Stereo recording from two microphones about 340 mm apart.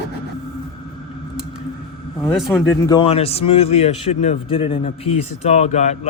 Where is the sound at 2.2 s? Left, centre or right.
Centre.